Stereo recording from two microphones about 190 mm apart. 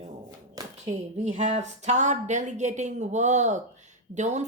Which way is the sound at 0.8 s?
40° right (ahead or behind).